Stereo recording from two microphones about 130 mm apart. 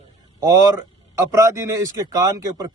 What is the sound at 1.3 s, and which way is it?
Speech, 25° right (ahead or behind).